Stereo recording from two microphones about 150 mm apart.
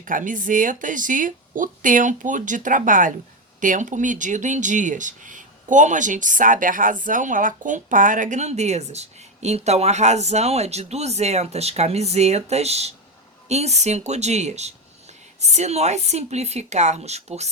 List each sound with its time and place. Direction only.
0.0 s a woman's voice: 60° right (ahead or behind); by 17.5 s 45° right (ahead or behind)